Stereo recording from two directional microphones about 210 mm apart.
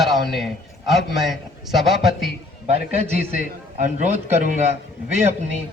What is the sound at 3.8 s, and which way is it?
Speech, 35° right (ahead or behind).